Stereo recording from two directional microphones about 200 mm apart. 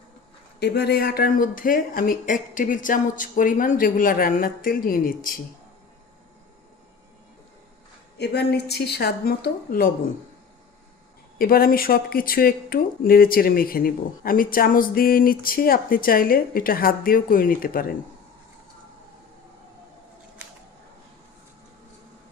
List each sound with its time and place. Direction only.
0.6 s speech: 55° left (ahead or behind)
8.2 s a woman's voice: 55° left (ahead or behind)
11.3 s speech: 45° left (ahead or behind)